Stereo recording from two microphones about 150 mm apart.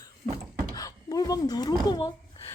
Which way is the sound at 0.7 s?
25° left (ahead or behind).